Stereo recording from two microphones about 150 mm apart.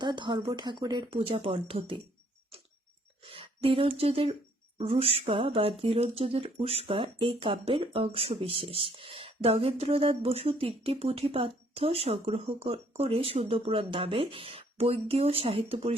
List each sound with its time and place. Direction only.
0.0 s speech: 30° right (ahead or behind)
3.2 s speech: 40° right (ahead or behind)